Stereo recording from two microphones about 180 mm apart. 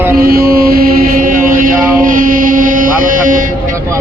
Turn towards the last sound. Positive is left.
turn(degrees=-50)  # may be behind; listen again after turning